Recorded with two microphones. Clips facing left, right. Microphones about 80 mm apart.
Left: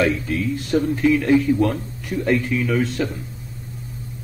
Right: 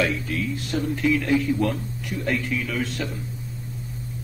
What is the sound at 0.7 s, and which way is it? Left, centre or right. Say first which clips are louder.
A man's voice: left 5 dB; left.